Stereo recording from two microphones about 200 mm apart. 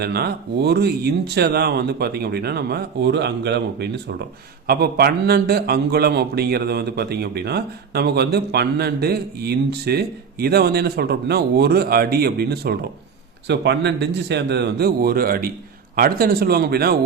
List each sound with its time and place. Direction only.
0.0 s a man's voice: 55° right (ahead or behind)